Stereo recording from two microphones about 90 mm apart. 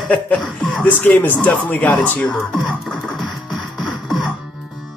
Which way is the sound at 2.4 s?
5° left (ahead or behind).